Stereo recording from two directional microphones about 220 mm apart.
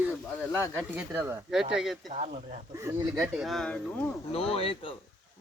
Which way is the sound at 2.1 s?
30° right (ahead or behind).